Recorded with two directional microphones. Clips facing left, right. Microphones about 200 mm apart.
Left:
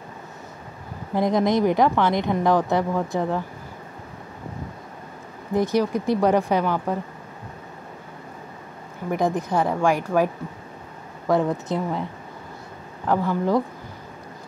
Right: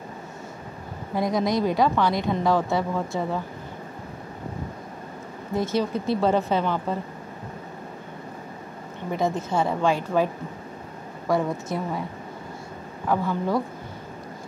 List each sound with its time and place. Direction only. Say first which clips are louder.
1.1 s a woman's voice: left 3 dB; 20° left (ahead or behind)
5.5 s speech: left 3 dB; 15° left (ahead or behind)
9.1 s a woman's voice: left 2 dB; 15° left (ahead or behind)
13.1 s speech: left 3 dB; 15° left (ahead or behind)